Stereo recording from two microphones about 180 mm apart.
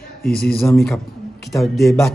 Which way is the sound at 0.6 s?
15° left (ahead or behind).